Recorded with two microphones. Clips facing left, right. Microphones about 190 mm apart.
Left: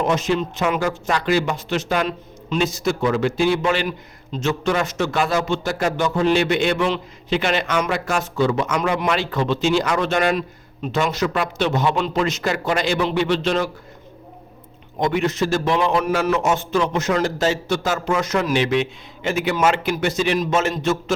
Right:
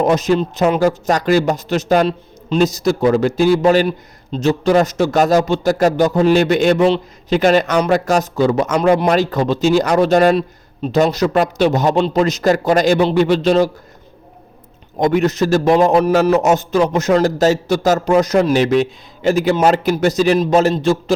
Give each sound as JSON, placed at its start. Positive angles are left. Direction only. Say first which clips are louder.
{"t": 0.0, "sound": "a man's voice", "louder": "right 6 dB", "side_deg": -40}
{"t": 14.9, "sound": "a man's voice", "louder": "right 6 dB", "side_deg": -45}